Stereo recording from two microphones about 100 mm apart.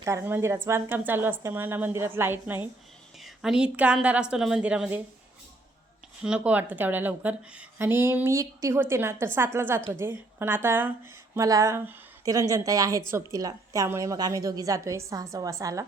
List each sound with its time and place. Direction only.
0.0 s a woman's voice: 25° right (ahead or behind)
3.2 s a woman's voice: 5° right (ahead or behind)
6.2 s a woman's voice: 10° right (ahead or behind)
11.4 s a woman's voice: 35° right (ahead or behind)